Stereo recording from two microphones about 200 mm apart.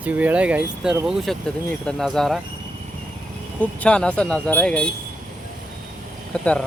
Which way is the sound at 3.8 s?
5° left (ahead or behind).